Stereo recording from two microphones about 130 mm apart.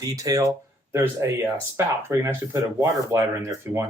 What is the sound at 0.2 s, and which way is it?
Speech, 25° right (ahead or behind).